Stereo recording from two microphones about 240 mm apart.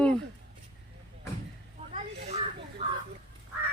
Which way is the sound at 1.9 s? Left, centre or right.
Right.